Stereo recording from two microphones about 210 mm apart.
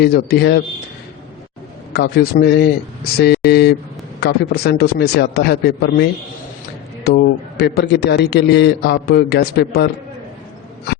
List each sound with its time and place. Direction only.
0.0 s a man's voice: 50° left (ahead or behind)
1.9 s a man's voice: 50° left (ahead or behind)